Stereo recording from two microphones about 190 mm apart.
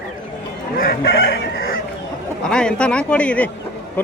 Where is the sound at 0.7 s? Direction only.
55° left (ahead or behind).